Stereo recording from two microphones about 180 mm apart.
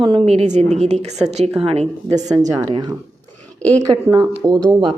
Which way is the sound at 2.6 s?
20° right (ahead or behind).